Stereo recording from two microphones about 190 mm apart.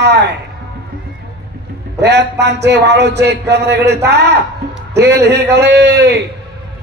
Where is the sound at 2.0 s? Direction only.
65° right (ahead or behind).